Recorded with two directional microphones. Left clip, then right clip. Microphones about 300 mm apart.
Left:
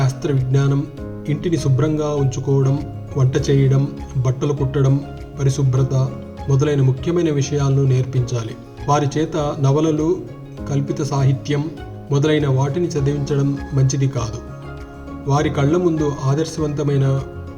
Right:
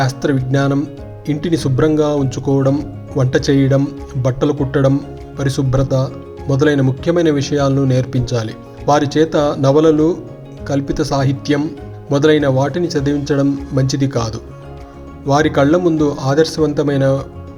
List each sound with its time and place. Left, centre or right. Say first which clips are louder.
0.5 s speech: right 6 dB; right